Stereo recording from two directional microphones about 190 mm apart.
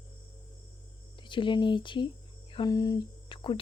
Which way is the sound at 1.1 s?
25° left (ahead or behind).